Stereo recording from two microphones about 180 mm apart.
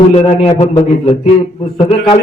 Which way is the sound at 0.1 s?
35° left (ahead or behind).